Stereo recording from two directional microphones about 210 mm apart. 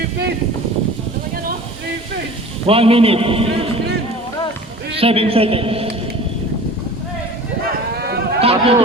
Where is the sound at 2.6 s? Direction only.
25° right (ahead or behind).